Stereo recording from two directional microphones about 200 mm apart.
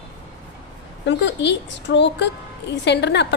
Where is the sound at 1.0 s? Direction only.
60° left (ahead or behind).